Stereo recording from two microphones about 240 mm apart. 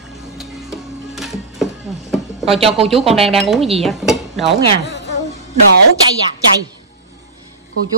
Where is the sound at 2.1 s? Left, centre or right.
Centre.